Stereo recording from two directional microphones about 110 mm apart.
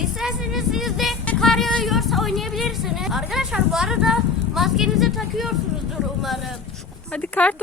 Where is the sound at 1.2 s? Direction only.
10° left (ahead or behind).